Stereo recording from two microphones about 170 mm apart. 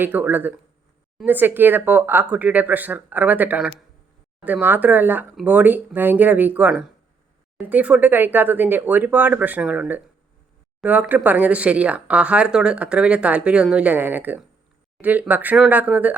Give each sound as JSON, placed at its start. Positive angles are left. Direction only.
{"t": 0.0, "sound": "speech", "side_deg": -10}